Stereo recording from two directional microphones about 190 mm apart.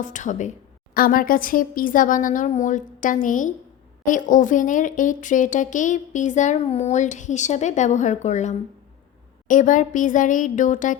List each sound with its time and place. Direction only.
0.0 s speech: 40° left (ahead or behind)